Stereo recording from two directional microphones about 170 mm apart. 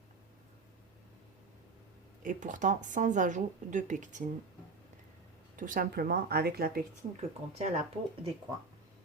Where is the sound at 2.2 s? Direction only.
50° right (ahead or behind).